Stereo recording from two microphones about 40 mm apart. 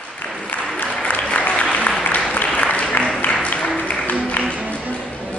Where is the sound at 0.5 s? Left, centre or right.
Left.